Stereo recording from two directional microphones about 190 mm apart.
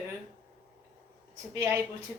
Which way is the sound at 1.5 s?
15° right (ahead or behind).